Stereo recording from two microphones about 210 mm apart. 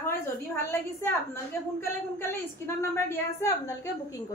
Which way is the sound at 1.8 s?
10° left (ahead or behind).